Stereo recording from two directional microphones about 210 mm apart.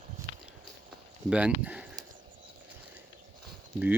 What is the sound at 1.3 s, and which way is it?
Speech, 5° right (ahead or behind).